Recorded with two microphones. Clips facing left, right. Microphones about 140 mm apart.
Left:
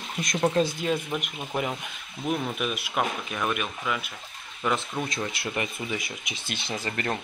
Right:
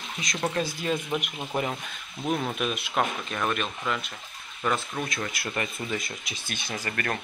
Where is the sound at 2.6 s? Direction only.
10° left (ahead or behind).